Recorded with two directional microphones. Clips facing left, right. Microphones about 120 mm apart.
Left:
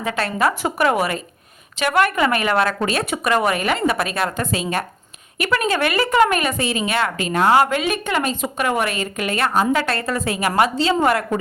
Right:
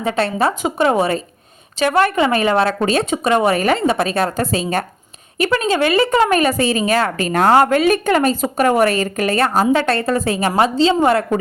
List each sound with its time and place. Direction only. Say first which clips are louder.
0.0 s a woman's voice: right 3 dB; 30° right (ahead or behind)